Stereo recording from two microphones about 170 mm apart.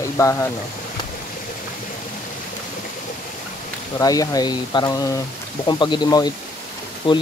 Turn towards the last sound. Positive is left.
turn(degrees=30)  # may be behind; listen again after turning